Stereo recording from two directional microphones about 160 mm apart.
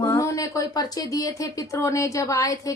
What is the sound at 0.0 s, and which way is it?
Speech, 20° left (ahead or behind).